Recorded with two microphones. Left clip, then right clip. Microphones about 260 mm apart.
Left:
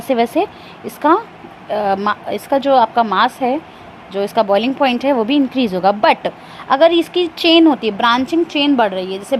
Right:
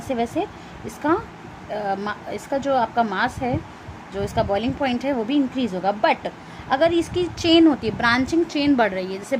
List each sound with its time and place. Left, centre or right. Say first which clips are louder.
0.1 s speech: left 9 dB; left